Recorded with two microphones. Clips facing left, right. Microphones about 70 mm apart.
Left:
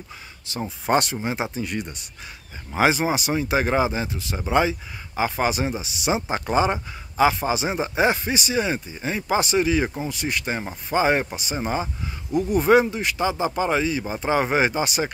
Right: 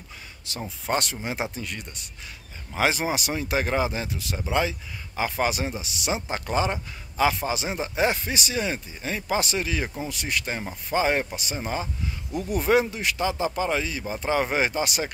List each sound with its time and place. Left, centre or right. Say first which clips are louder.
0.5 s speech: left 5 dB; centre
0.8 s speech: left 6 dB; centre
1.2 s speech: left 4 dB; centre
1.7 s speech: left 7 dB; centre
3.0 s speech: left 4 dB; centre
4.4 s speech: left 5 dB; centre
12.3 s speech: left 5 dB; centre